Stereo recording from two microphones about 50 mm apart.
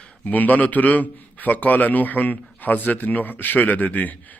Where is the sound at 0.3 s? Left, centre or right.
Left.